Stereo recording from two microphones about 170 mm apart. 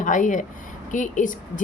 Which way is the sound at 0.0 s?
50° left (ahead or behind).